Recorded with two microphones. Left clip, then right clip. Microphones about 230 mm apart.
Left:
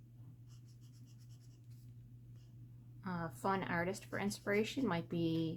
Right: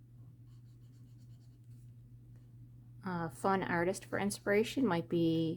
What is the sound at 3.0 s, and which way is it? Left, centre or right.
Speech, right.